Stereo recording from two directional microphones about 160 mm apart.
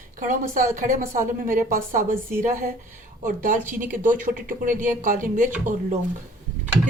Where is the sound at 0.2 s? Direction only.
55° right (ahead or behind).